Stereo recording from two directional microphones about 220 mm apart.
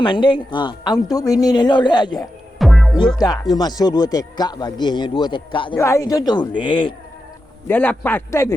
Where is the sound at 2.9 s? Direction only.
20° left (ahead or behind).